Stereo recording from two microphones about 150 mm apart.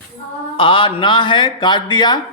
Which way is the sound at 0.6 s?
35° left (ahead or behind).